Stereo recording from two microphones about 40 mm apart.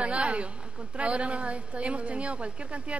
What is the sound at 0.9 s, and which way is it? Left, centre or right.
A woman's voice, right.